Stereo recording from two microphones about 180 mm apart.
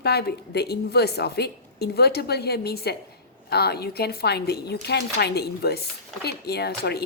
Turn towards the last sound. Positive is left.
turn(degrees=65)  # may be behind; listen again after turning